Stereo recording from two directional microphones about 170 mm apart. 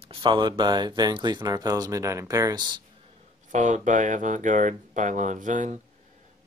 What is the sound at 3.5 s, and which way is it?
Speech, 50° right (ahead or behind).